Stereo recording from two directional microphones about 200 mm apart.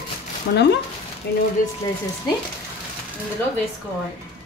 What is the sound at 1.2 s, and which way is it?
Speech, 55° left (ahead or behind).